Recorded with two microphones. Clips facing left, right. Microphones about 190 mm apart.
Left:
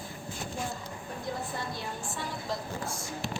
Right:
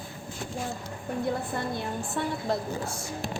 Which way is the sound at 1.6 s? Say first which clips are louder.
Right 6 dB; 55° right (ahead or behind).